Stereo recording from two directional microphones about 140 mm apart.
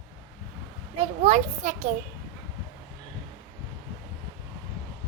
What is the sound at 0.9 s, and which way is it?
Speech, 50° right (ahead or behind).